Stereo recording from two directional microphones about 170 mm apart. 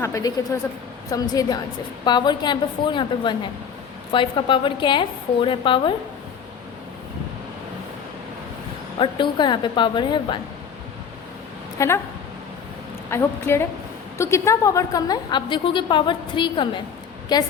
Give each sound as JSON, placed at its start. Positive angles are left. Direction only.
{"t": 0.0, "sound": "a woman's voice", "side_deg": 20}
{"t": 9.0, "sound": "a woman's voice", "side_deg": 30}
{"t": 11.8, "sound": "a woman's voice", "side_deg": 15}
{"t": 13.1, "sound": "a woman's voice", "side_deg": 15}